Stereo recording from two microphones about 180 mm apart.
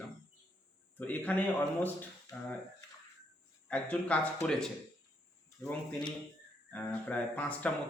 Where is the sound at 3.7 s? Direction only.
5° left (ahead or behind).